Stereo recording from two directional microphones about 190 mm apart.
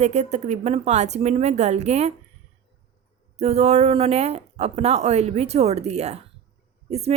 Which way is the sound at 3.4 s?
35° right (ahead or behind).